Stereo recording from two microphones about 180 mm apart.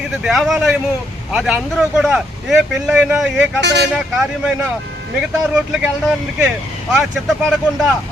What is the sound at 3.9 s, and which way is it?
Speech, 5° right (ahead or behind).